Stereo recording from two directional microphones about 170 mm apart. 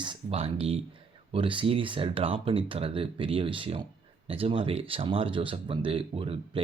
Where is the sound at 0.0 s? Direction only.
30° right (ahead or behind).